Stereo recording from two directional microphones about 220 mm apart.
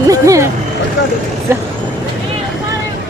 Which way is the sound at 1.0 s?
55° left (ahead or behind).